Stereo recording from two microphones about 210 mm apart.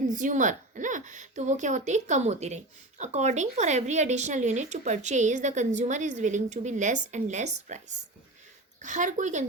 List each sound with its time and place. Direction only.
0.1 s speech: 35° right (ahead or behind)